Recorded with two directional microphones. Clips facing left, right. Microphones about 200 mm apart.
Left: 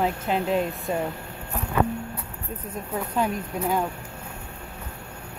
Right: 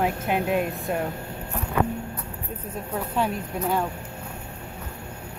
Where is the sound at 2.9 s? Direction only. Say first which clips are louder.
Even; centre (ahead or behind).